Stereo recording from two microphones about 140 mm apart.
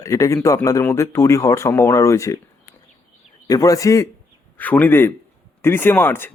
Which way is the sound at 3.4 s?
25° left (ahead or behind).